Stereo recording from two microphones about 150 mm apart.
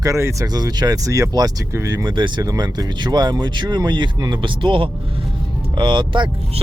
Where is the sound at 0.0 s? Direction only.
20° right (ahead or behind).